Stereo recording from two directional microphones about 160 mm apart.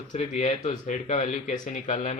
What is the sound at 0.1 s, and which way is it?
Speech, 45° left (ahead or behind).